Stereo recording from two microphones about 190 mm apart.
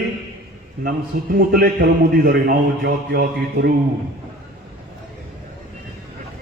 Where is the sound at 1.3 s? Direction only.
55° right (ahead or behind).